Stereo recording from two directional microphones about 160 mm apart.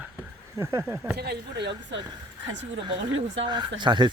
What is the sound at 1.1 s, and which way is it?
Speech, 90° right.